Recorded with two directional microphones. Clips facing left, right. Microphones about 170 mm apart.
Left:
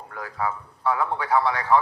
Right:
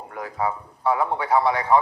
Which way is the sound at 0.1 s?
20° right (ahead or behind).